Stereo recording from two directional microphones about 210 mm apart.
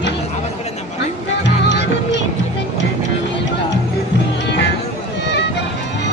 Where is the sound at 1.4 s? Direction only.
55° left (ahead or behind).